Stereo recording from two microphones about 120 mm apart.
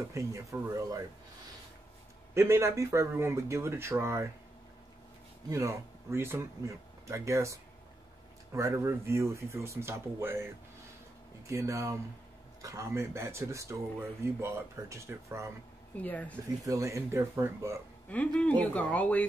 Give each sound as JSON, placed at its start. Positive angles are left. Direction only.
{"t": 0.1, "sound": "speech", "side_deg": -25}
{"t": 2.3, "sound": "speech", "side_deg": -20}
{"t": 5.5, "sound": "speech", "side_deg": -25}
{"t": 16.0, "sound": "speech", "side_deg": 10}
{"t": 16.6, "sound": "speech", "side_deg": -25}
{"t": 18.1, "sound": "speech", "side_deg": 10}